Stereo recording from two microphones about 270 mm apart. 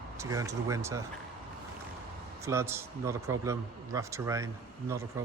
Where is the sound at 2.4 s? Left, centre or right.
Centre.